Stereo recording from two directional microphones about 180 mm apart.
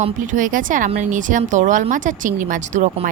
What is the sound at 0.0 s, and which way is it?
Speech, 45° right (ahead or behind).